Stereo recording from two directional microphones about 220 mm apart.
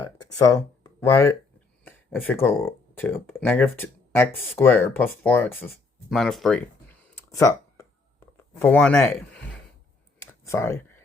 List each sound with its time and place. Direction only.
0.0 s a sound: 15° left (ahead or behind)
1.1 s speech: 10° left (ahead or behind)
10.2 s clicking: 10° left (ahead or behind)